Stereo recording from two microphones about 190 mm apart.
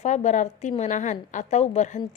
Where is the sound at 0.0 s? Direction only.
40° left (ahead or behind).